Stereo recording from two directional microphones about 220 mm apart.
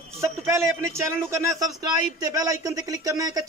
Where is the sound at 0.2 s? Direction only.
10° right (ahead or behind).